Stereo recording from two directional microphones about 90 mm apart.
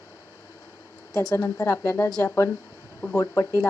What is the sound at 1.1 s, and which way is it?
Speech, 35° left (ahead or behind).